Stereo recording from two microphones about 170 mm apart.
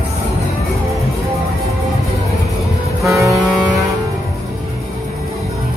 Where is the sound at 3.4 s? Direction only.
Centre (ahead or behind).